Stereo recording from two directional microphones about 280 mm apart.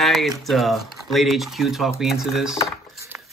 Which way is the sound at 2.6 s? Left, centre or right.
Centre.